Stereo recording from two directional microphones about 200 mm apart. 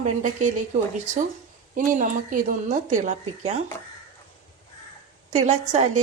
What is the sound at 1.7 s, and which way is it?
A woman's voice, 40° right (ahead or behind).